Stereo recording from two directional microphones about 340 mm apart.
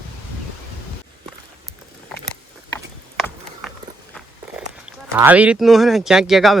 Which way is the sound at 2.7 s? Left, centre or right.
Centre.